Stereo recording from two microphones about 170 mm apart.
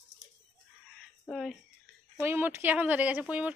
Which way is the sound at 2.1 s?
15° right (ahead or behind).